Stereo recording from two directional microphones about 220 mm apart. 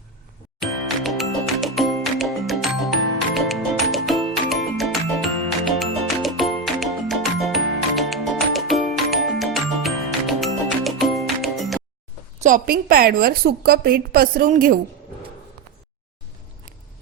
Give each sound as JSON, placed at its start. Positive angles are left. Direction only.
{"t": 0.6, "sound": "music", "side_deg": 0}
{"t": 12.4, "sound": "a woman's voice", "side_deg": -35}